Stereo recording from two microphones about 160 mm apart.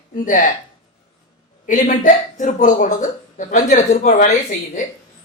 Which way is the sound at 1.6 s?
55° left (ahead or behind).